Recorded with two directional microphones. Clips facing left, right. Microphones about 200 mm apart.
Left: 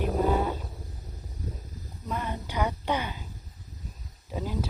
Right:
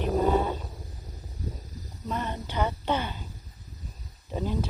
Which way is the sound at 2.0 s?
10° left (ahead or behind).